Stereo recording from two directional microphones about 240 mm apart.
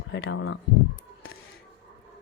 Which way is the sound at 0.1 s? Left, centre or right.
Left.